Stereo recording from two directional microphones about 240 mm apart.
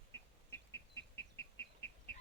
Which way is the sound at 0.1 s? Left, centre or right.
Centre.